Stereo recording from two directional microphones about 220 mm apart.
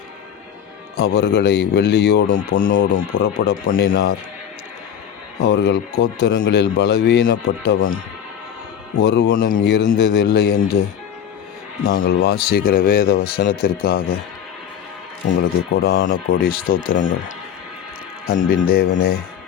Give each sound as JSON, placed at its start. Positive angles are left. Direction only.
{"t": 0.9, "sound": "a man's voice", "side_deg": 45}
{"t": 5.4, "sound": "a man's voice", "side_deg": 50}
{"t": 9.0, "sound": "a man's voice", "side_deg": 50}
{"t": 11.9, "sound": "a man's voice", "side_deg": 40}
{"t": 15.7, "sound": "a man's voice", "side_deg": 45}